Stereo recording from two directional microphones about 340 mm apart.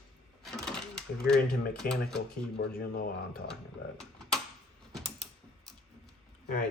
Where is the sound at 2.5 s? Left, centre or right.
Left.